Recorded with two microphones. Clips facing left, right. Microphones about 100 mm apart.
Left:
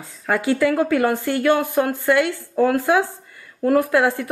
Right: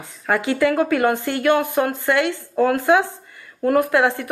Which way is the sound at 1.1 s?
20° right (ahead or behind).